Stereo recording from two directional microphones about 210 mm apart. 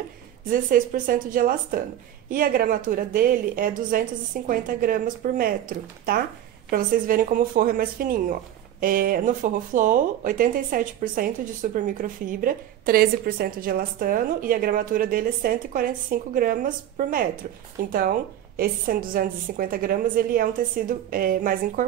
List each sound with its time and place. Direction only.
0.5 s a woman's voice: 40° right (ahead or behind)